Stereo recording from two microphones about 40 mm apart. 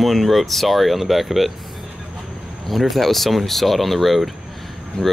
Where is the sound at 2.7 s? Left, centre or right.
Centre.